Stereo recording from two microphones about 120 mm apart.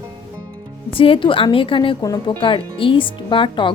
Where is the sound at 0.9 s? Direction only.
50° left (ahead or behind).